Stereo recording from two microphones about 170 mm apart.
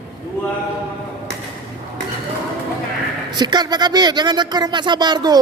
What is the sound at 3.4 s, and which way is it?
Speech, 25° right (ahead or behind).